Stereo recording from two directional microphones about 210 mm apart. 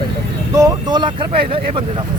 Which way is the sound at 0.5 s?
20° right (ahead or behind).